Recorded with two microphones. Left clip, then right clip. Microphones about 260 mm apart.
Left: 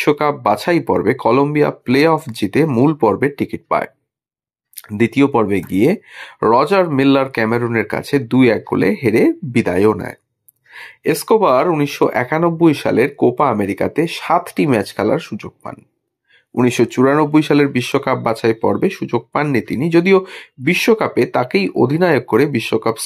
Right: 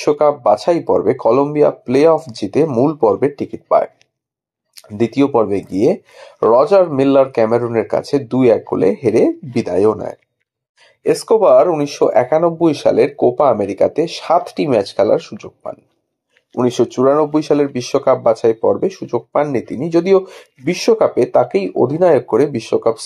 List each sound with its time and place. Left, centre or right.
0.0 s speech: left
2.0 s speech: left
2.4 s speech: left
4.9 s speech: left
11.0 s speech: left
16.5 s speech: left